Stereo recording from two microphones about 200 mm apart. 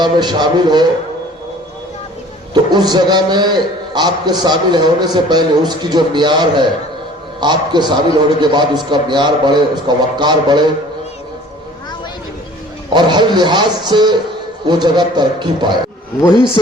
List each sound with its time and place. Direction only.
0.0 s a man's voice: 20° right (ahead or behind)
2.5 s a man's voice: 20° right (ahead or behind)
12.9 s a man's voice: 20° right (ahead or behind)